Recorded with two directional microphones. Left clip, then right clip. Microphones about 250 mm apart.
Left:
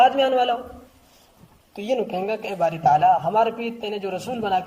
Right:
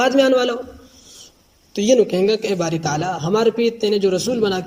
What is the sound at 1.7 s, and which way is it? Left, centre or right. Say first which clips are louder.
A man's voice: right 9 dB; right.